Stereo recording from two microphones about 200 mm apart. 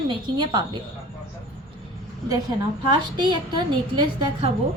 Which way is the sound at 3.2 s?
25° right (ahead or behind).